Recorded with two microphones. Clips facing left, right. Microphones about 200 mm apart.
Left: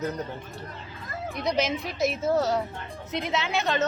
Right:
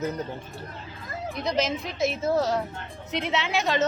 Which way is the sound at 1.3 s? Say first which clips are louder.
Even; centre (ahead or behind).